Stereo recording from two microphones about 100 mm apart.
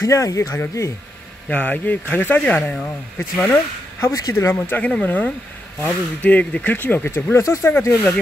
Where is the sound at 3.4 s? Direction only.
30° left (ahead or behind).